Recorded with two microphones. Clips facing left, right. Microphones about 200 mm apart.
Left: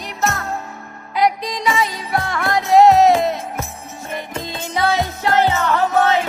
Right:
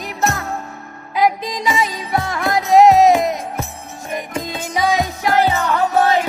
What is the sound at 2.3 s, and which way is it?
Music, 15° right (ahead or behind).